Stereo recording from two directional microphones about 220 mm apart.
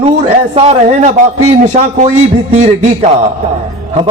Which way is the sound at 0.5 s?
30° right (ahead or behind).